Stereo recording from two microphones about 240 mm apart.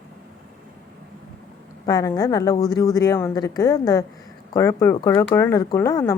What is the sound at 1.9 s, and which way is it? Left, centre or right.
A woman's voice, centre.